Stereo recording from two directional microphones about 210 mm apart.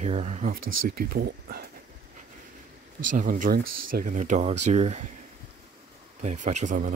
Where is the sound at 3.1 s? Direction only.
40° right (ahead or behind).